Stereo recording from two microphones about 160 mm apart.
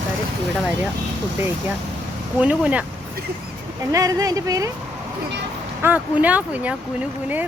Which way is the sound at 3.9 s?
20° right (ahead or behind).